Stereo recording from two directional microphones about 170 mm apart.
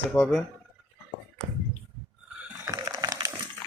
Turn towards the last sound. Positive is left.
turn(degrees=-20)  # may be behind; listen again after turning